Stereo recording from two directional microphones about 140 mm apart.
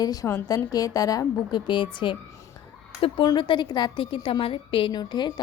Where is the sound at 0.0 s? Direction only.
25° left (ahead or behind).